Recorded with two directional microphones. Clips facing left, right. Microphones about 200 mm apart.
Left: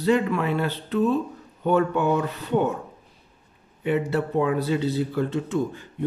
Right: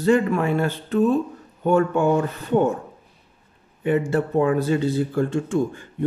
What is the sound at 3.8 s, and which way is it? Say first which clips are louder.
Speech: right 3 dB; 50° right (ahead or behind).